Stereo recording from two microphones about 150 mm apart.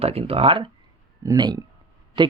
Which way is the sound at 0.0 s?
40° right (ahead or behind).